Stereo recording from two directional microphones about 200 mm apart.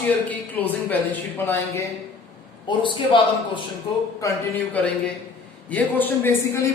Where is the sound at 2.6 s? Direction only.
25° left (ahead or behind).